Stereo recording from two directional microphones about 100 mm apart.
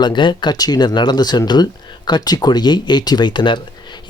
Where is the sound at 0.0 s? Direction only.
50° left (ahead or behind).